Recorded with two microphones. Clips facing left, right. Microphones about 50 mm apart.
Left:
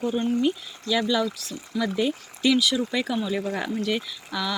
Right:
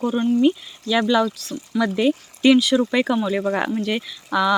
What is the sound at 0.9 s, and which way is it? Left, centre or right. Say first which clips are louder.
Speech: right 5 dB; right.